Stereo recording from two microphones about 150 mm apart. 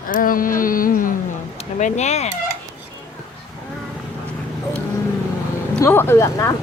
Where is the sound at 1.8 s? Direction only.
50° left (ahead or behind).